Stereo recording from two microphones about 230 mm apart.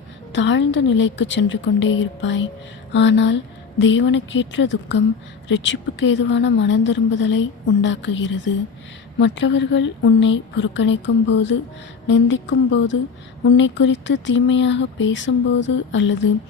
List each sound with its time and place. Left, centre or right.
0.3 s a woman's voice: left